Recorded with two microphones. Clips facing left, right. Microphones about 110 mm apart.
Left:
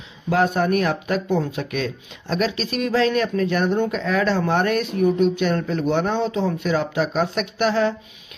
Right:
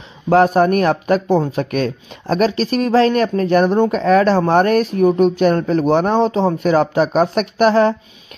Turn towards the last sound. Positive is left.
turn(degrees=-45)  # may be behind; listen again after turning